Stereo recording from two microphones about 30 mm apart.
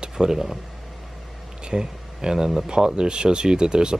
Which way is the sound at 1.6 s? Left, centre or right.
Right.